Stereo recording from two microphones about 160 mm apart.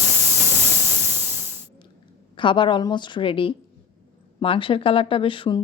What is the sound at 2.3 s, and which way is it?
Speech, 30° left (ahead or behind).